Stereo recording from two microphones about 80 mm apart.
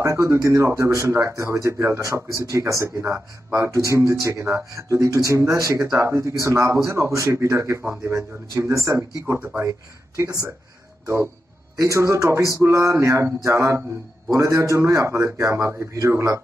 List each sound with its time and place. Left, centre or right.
0.0 s speech: right
9.2 s speech: right
9.6 s speech: right
11.8 s speech: right